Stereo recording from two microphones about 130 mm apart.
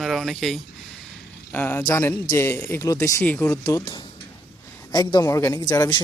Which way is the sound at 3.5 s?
25° left (ahead or behind).